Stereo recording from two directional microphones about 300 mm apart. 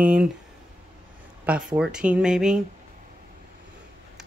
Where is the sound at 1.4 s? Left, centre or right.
Centre.